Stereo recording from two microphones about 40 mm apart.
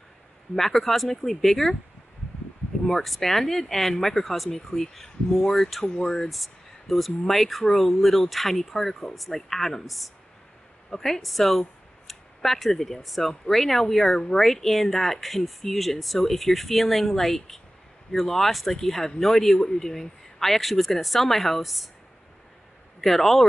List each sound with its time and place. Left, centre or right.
0.6 s speech: centre
2.9 s speech: centre
5.9 s speech: centre
6.2 s speech: centre
22.9 s a man's voice: centre